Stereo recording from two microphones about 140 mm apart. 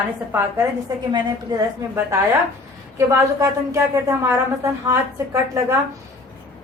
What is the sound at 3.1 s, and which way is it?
A woman's voice, 20° right (ahead or behind).